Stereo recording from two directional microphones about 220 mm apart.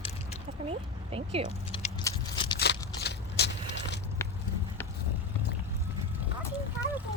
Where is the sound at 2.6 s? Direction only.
50° left (ahead or behind).